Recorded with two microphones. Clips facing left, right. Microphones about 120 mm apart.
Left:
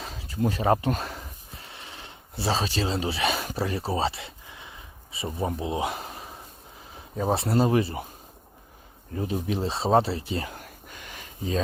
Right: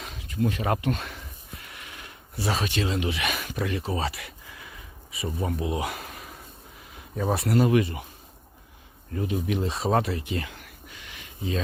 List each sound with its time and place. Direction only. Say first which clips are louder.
0.0 s a sound: even; 35° left (ahead or behind)
6.9 s speech: left 1 dB; 30° left (ahead or behind)
9.1 s speech: right 1 dB; 35° left (ahead or behind)